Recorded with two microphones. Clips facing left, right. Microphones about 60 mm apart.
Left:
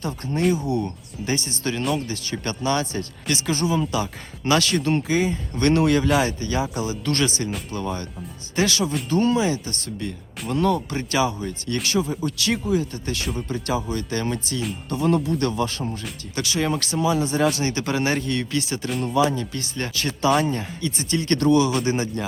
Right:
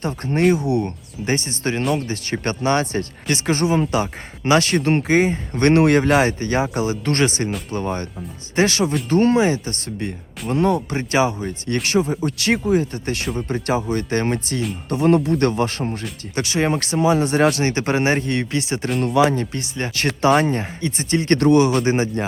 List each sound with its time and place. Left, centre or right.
0.3 s speech: right
1.2 s speech: right
16.3 s speech: right
17.2 s speech: right
17.7 s speech: right
18.9 s speech: right
19.5 s speech: right
19.9 s speech: right
21.8 s speech: right